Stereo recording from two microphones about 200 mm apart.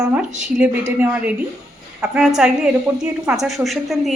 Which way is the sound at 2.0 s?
5° right (ahead or behind).